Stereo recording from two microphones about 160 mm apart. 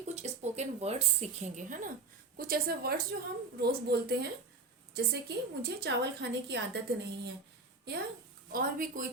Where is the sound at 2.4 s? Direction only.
70° right (ahead or behind).